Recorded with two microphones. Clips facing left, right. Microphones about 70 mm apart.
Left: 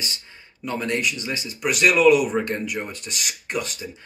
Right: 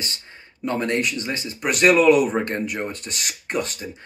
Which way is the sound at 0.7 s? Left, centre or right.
Right.